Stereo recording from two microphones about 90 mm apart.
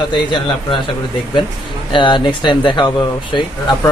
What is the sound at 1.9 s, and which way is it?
Speech, 60° left (ahead or behind).